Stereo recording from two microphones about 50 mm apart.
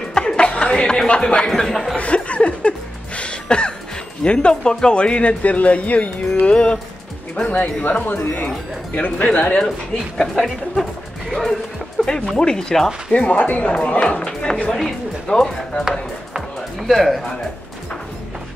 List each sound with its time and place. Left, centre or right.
0.1 s chuckle: centre
1.5 s speech: centre
2.0 s chuckle: left
3.2 s throat clearing: centre
4.2 s speech: left
7.4 s speech: left
8.9 s speech: left
10.1 s speech: centre
12.0 s music: centre
12.4 s speech: centre
13.1 s speech: left
14.7 s speech: centre
16.8 s speech: centre